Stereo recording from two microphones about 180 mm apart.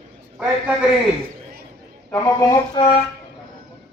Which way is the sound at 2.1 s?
20° left (ahead or behind).